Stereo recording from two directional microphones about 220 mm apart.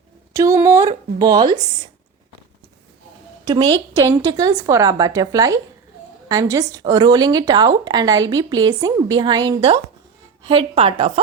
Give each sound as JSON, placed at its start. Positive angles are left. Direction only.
{"t": 0.3, "sound": "speech", "side_deg": -15}
{"t": 3.4, "sound": "a woman's voice", "side_deg": -20}